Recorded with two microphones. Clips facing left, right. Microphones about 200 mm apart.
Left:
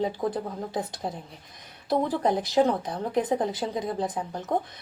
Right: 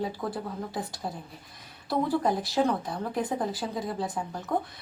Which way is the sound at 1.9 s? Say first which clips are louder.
Left 2 dB; 20° left (ahead or behind).